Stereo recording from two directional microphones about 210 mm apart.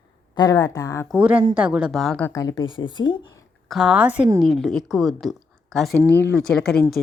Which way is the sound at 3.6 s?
Centre (ahead or behind).